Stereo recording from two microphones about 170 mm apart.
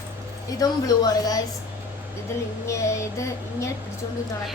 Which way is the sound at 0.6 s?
20° left (ahead or behind).